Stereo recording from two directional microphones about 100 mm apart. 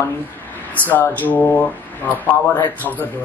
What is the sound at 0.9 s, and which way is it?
A man's voice, 20° left (ahead or behind).